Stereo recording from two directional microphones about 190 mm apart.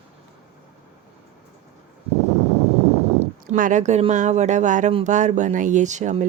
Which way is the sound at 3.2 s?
45° right (ahead or behind).